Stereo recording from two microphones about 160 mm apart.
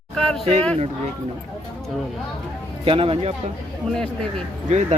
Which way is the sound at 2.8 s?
35° right (ahead or behind).